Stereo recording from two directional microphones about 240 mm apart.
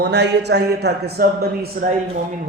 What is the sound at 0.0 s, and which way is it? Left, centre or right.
A man's voice, right.